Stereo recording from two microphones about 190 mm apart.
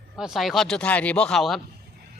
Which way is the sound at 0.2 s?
Centre (ahead or behind).